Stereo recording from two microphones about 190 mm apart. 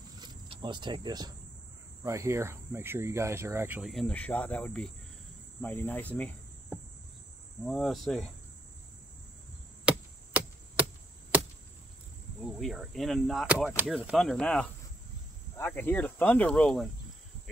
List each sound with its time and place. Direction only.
0.2 s cricket: 25° right (ahead or behind)
2.0 s speech: 15° right (ahead or behind)
3.9 s speech: 5° left (ahead or behind)
7.6 s speech: centre (ahead or behind)
9.8 s chop: 5° right (ahead or behind)
12.5 s speech: centre (ahead or behind)